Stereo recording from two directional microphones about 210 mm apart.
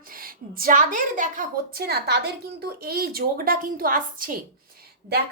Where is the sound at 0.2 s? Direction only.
45° right (ahead or behind).